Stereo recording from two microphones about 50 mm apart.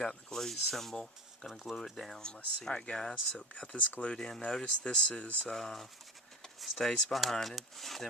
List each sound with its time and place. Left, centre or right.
0.0 s speech: centre
1.7 s speech: centre; by 5.3 s left
5.5 s speech: centre